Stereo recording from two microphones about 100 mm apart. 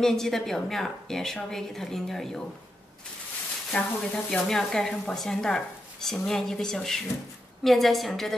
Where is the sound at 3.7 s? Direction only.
15° left (ahead or behind).